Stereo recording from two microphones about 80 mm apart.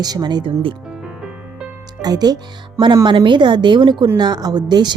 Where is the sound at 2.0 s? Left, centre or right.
Right.